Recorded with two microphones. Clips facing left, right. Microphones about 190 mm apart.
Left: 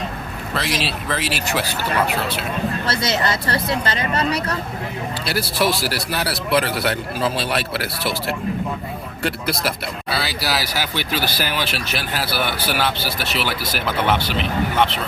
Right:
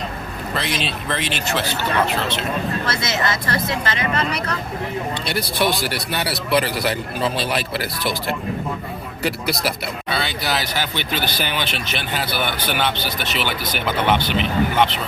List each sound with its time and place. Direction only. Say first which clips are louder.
0.5 s speech: left 1 dB; centre (ahead or behind)
3.4 s speech: left 1 dB; 30° left (ahead or behind)
5.2 s speech: left 2 dB; 5° left (ahead or behind)
9.2 s speech: even; centre (ahead or behind)